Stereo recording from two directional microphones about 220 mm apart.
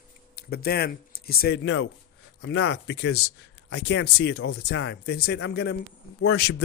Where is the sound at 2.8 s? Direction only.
50° left (ahead or behind).